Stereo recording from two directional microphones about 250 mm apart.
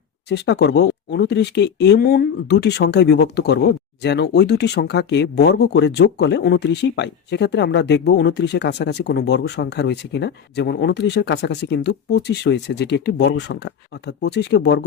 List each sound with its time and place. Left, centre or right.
0.3 s speech: left